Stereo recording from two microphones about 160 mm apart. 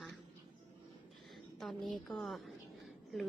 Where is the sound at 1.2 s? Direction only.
Centre (ahead or behind).